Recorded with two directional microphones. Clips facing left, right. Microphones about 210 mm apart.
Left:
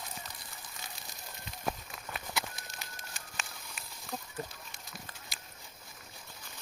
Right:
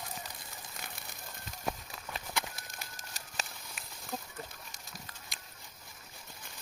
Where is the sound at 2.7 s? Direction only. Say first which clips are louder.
Even; 40° right (ahead or behind).